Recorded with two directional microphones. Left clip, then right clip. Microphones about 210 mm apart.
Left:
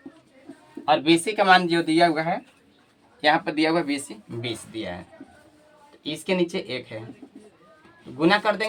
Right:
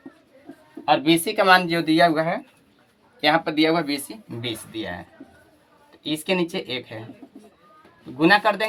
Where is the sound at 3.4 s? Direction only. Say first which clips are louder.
Right 2 dB; 45° right (ahead or behind).